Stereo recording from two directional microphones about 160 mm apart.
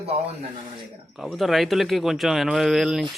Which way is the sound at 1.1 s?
Centre (ahead or behind).